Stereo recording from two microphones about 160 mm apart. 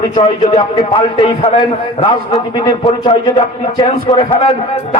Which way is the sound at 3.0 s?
35° left (ahead or behind).